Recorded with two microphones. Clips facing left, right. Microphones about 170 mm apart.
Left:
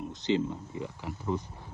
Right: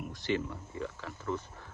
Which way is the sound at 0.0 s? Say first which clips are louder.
Left 5 dB; 20° left (ahead or behind).